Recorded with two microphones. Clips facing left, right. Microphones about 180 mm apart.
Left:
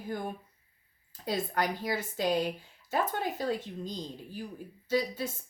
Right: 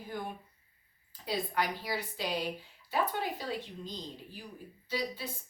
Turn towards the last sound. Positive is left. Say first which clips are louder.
# left 6 dB
turn(degrees=45)  # may be behind; listen again after turning